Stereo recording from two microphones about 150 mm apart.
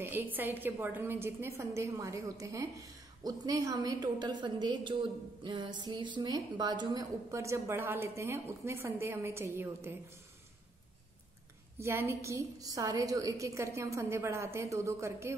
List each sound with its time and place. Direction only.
0.0 s a woman's voice: 15° right (ahead or behind)
11.8 s a woman's voice: 15° right (ahead or behind)